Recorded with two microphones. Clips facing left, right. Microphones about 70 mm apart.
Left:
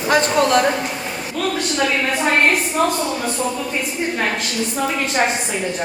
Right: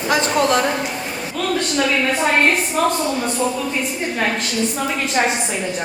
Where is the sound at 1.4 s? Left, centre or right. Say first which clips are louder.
Even; centre.